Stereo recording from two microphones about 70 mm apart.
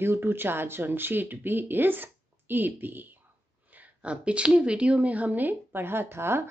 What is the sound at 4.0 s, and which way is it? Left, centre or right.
A woman's voice, centre.